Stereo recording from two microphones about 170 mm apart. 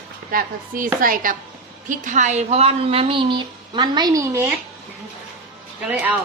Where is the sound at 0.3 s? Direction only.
55° right (ahead or behind); by 4.5 s 15° right (ahead or behind).